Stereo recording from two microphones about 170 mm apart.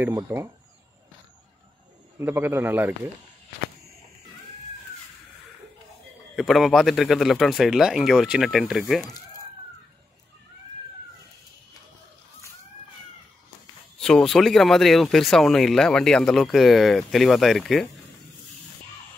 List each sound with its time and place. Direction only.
0.1 s a man's voice: 15° right (ahead or behind)
2.1 s a man's voice: 15° right (ahead or behind)
6.3 s speech: centre (ahead or behind)
13.9 s speech: 5° left (ahead or behind)